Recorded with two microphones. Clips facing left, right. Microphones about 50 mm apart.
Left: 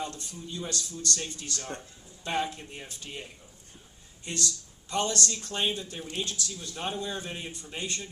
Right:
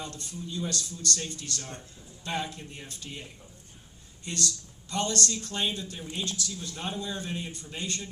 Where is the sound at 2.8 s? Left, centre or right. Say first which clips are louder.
Left 1 dB; left.